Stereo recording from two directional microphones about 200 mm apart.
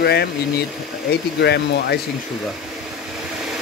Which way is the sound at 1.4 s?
55° left (ahead or behind).